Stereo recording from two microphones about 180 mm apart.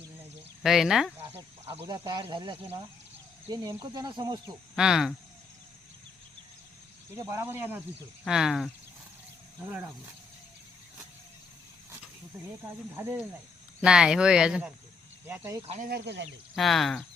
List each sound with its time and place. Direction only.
0.6 s speech: centre (ahead or behind)
1.9 s speech: 25° right (ahead or behind)
4.7 s speech: centre (ahead or behind)
7.1 s speech: 15° right (ahead or behind)
13.0 s speech: 15° right (ahead or behind)
15.3 s speech: 15° right (ahead or behind)
15.6 s speech: 35° right (ahead or behind)
15.9 s speech: 65° right (ahead or behind)
16.6 s speech: centre (ahead or behind)